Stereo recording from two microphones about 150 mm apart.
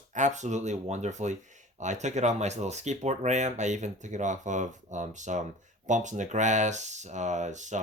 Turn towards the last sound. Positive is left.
turn(degrees=-55)  # may be behind; listen again after turning